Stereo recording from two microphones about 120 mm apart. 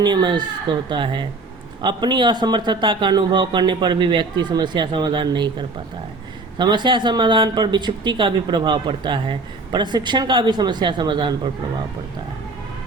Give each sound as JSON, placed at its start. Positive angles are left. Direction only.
{"t": 0.0, "sound": "speech", "side_deg": -40}